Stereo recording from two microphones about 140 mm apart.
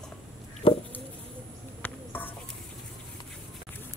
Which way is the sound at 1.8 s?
15° left (ahead or behind).